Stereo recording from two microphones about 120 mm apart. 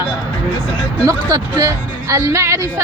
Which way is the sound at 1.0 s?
30° right (ahead or behind).